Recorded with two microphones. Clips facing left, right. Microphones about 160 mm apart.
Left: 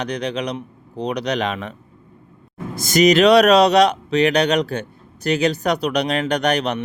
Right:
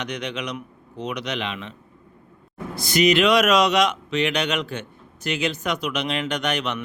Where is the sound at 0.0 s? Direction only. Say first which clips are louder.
Left 6 dB; 35° left (ahead or behind).